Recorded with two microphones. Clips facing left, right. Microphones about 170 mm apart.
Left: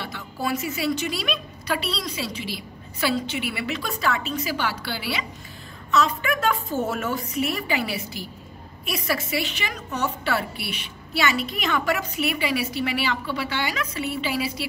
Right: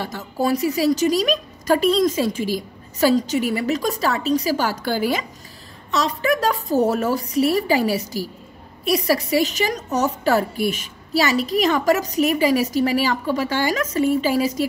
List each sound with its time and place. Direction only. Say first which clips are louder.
0.0 s a woman's voice: right 7 dB; 40° right (ahead or behind)